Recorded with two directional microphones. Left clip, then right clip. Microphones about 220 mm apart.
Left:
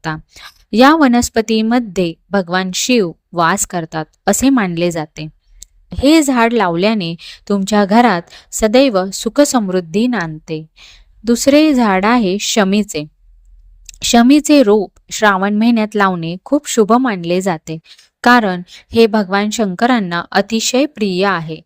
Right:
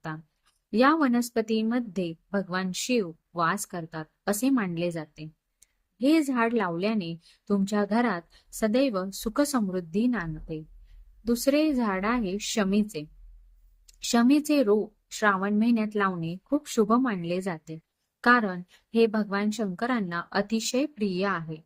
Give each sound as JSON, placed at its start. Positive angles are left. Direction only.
{"t": 0.7, "sound": "a woman's voice", "side_deg": 40}